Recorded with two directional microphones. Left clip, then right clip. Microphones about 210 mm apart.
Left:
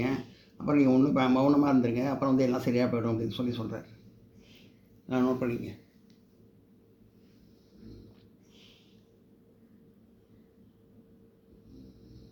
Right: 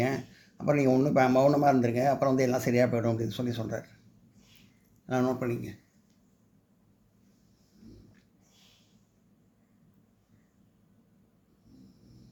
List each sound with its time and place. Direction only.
0.6 s speech: 45° right (ahead or behind)
5.0 s speech: 40° right (ahead or behind)